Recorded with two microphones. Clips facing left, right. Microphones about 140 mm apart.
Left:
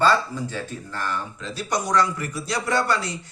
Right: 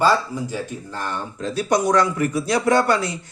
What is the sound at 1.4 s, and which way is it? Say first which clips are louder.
A man's voice: right 10 dB; 45° right (ahead or behind).